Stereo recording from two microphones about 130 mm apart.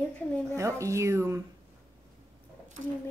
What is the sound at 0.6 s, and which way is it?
Speech, 25° right (ahead or behind).